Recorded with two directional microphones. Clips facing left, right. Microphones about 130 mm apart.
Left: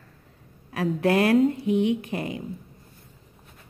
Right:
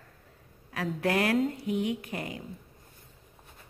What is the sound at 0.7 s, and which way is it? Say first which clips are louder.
Speech: left 6 dB; 25° left (ahead or behind).